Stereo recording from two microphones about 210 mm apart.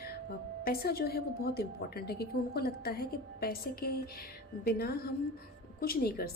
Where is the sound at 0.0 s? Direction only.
45° left (ahead or behind).